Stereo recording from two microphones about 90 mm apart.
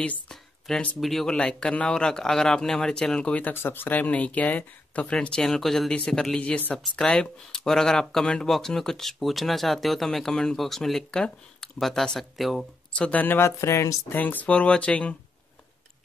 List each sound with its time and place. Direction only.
0.3 s speech: 5° left (ahead or behind)
12.9 s speech: 15° left (ahead or behind); by 14.1 s 35° left (ahead or behind)
14.1 s speech: 20° left (ahead or behind)